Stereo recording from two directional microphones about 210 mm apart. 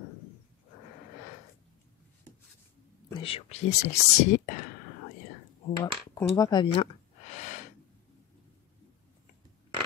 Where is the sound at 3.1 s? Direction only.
25° left (ahead or behind).